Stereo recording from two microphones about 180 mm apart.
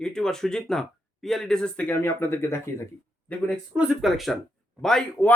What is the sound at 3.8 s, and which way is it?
Speech, 5° right (ahead or behind).